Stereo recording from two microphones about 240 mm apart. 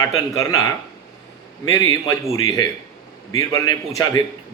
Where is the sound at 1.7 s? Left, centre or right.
Centre.